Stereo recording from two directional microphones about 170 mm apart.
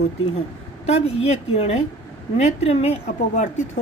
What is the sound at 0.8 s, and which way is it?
Speech, 40° left (ahead or behind).